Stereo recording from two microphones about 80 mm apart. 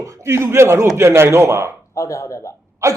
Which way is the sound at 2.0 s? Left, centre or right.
Left.